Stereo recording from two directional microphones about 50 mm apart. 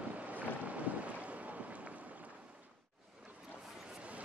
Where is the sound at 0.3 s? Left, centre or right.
Right.